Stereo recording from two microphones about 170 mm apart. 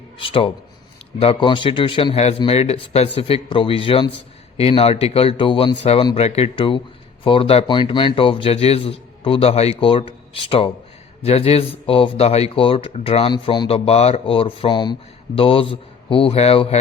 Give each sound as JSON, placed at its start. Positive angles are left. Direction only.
{"t": 0.2, "sound": "speech", "side_deg": 30}